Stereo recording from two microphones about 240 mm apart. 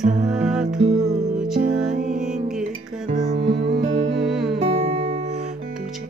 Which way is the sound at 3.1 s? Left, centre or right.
Right.